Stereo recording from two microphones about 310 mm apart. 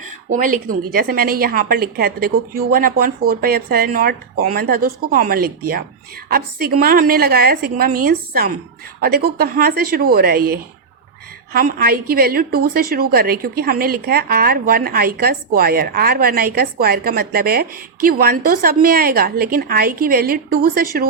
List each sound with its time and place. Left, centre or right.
0.3 s a woman's voice: right